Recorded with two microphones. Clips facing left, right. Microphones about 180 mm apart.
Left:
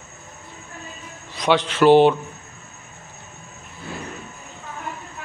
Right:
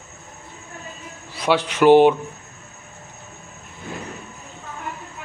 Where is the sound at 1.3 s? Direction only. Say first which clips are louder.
Left 1 dB; 10° right (ahead or behind).